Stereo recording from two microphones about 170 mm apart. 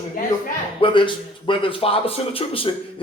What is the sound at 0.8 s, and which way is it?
A man's voice, 30° left (ahead or behind).